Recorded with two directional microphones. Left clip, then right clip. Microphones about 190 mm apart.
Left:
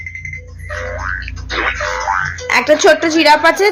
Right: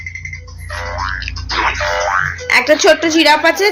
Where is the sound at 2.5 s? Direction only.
10° left (ahead or behind).